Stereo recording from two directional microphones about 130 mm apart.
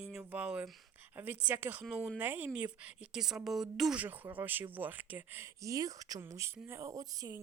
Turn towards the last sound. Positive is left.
turn(degrees=-30)  # may be behind; listen again after turning